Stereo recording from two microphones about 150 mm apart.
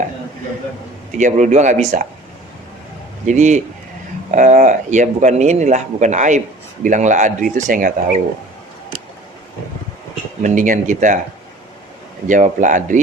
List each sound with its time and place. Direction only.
1.2 s speech: 55° right (ahead or behind)
3.2 s speech: 50° right (ahead or behind)
10.4 s speech: 60° right (ahead or behind)
12.3 s speech: 55° right (ahead or behind)